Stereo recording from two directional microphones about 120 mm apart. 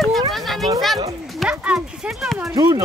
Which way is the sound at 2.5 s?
35° right (ahead or behind).